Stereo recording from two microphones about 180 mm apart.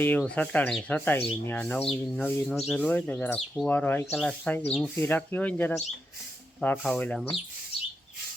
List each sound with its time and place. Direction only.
0.0 s speech: 5° left (ahead or behind)